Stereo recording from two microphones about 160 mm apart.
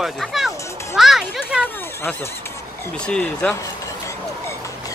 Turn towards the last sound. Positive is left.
turn(degrees=5)  # may be behind; listen again after turning